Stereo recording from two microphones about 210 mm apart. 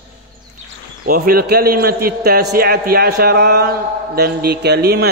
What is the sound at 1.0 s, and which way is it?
A man's voice, 45° right (ahead or behind).